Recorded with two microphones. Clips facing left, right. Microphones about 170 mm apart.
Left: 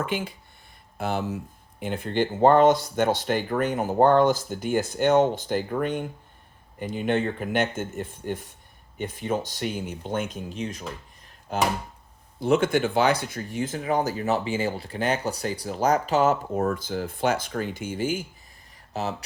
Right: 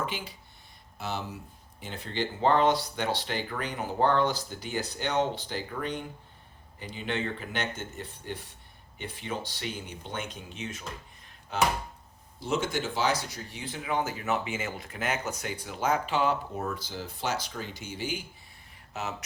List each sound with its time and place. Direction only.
0.0 s speech: 55° left (ahead or behind)
12.4 s speech: 55° left (ahead or behind)
18.9 s speech: 35° left (ahead or behind)